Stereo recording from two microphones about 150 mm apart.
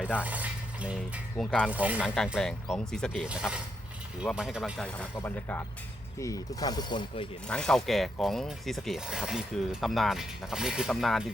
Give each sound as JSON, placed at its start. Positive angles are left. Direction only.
{"t": 0.0, "sound": "a sound", "side_deg": -10}
{"t": 1.4, "sound": "speech", "side_deg": 5}
{"t": 1.7, "sound": "speech", "side_deg": -10}
{"t": 2.0, "sound": "speech", "side_deg": 5}
{"t": 5.1, "sound": "speech", "side_deg": 15}
{"t": 7.4, "sound": "speech", "side_deg": 5}